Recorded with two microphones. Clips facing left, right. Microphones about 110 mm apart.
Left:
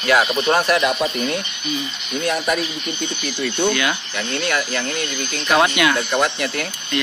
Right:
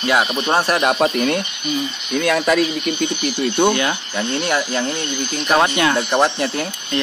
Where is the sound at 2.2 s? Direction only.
90° right.